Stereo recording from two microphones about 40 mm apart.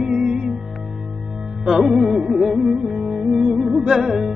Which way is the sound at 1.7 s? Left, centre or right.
Centre.